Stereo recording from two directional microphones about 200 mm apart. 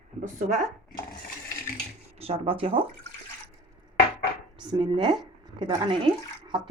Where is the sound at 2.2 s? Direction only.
30° right (ahead or behind).